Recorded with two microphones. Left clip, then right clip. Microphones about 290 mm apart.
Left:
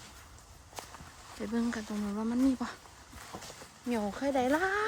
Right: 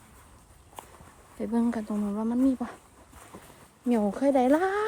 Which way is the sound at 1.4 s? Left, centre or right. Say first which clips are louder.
Right 6 dB; centre.